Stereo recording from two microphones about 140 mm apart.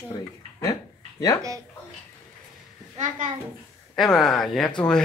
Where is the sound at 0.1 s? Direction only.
25° left (ahead or behind).